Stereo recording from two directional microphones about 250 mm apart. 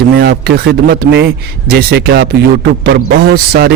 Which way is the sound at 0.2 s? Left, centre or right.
Right.